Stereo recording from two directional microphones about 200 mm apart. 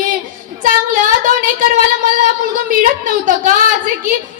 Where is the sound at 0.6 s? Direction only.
40° right (ahead or behind).